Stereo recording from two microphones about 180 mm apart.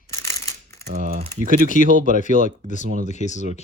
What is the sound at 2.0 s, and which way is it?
Speech, 45° left (ahead or behind).